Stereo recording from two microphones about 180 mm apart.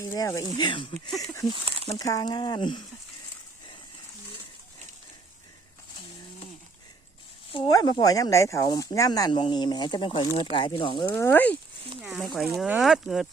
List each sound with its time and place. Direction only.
0.0 s speech: 20° left (ahead or behind)
1.5 s speech: 30° right (ahead or behind)
2.0 s speech: 20° left (ahead or behind)
7.5 s speech: 25° left (ahead or behind)
11.1 s speech: 10° left (ahead or behind)
12.0 s speech: centre (ahead or behind)